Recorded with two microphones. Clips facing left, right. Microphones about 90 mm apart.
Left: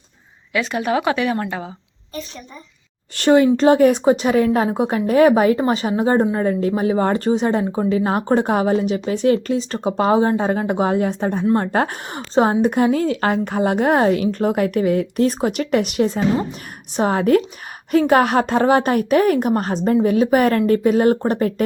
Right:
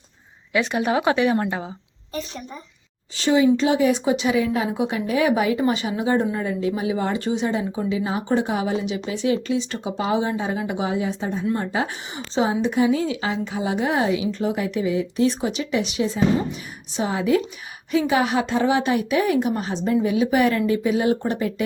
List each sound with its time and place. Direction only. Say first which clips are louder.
0.5 s speech: left 1 dB; 20° right (ahead or behind)
3.2 s a woman's voice: left 4 dB; 55° left (ahead or behind)